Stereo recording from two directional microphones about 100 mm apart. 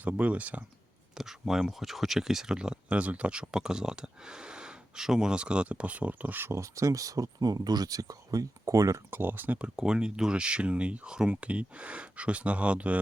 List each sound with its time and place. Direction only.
0.0 s speech: 15° right (ahead or behind); by 9.0 s 35° right (ahead or behind)
9.0 s speech: 20° right (ahead or behind)